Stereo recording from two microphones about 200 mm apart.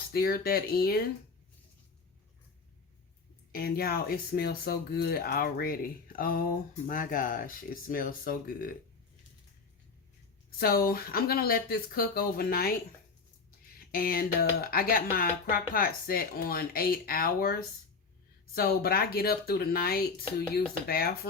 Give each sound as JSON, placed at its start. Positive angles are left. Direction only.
{"t": 0.1, "sound": "speech", "side_deg": 50}
{"t": 3.5, "sound": "speech", "side_deg": 50}
{"t": 10.6, "sound": "speech", "side_deg": 50}
{"t": 13.7, "sound": "speech", "side_deg": 45}